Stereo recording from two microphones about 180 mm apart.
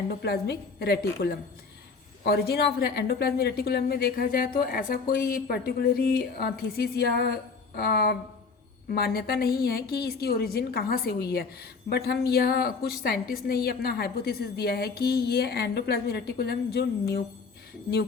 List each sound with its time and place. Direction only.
0.2 s a woman's voice: 65° left (ahead or behind)